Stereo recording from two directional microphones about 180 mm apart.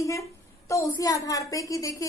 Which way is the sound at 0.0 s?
15° left (ahead or behind).